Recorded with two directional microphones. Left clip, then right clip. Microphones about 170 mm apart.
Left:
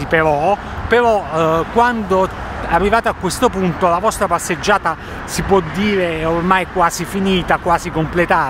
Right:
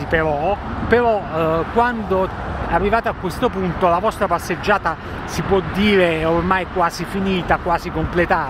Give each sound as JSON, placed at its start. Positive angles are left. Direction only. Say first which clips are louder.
{"t": 0.1, "sound": "speech", "louder": "left 5 dB", "side_deg": 25}
{"t": 3.3, "sound": "speech", "louder": "left 4 dB", "side_deg": 35}
{"t": 3.8, "sound": "speech", "louder": "left 2 dB", "side_deg": 15}
{"t": 5.8, "sound": "speech", "louder": "right 2 dB", "side_deg": 0}
{"t": 6.5, "sound": "speech", "louder": "left 4 dB", "side_deg": 20}